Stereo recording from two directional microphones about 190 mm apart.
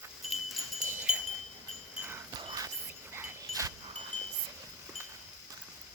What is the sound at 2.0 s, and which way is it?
Dog, 15° right (ahead or behind).